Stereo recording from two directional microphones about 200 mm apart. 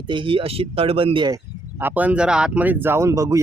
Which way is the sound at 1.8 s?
10° right (ahead or behind).